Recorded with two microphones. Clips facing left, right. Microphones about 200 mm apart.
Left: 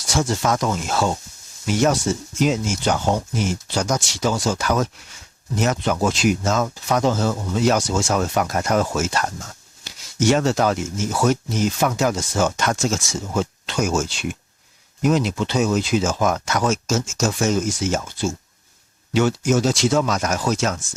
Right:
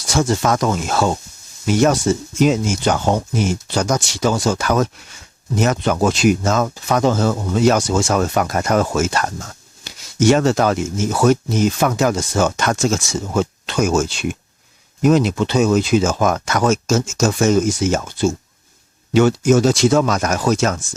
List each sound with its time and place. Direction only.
0.1 s speech: 65° right (ahead or behind)
16.9 s speech: 75° right (ahead or behind); by 20.8 s 60° right (ahead or behind)